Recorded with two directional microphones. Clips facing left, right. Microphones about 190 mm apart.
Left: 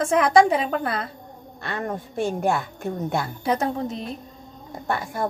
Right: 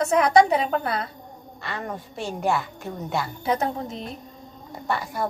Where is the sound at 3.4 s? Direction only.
40° left (ahead or behind).